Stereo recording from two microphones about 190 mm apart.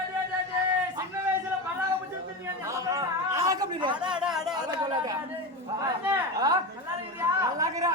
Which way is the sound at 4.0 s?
5° right (ahead or behind).